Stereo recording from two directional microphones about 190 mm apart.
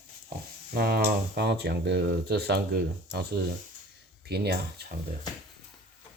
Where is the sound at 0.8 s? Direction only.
55° right (ahead or behind).